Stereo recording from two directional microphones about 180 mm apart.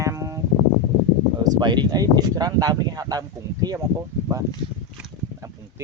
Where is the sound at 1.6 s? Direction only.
25° right (ahead or behind).